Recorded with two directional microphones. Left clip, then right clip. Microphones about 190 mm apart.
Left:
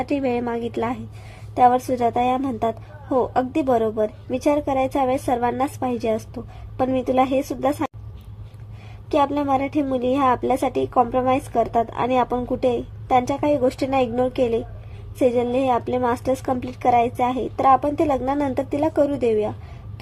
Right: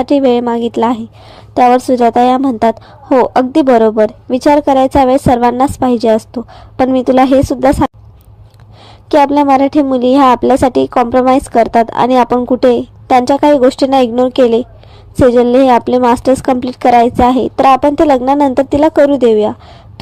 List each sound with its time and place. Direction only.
0.0 s a woman's voice: 30° right (ahead or behind)
9.0 s a woman's voice: 35° right (ahead or behind)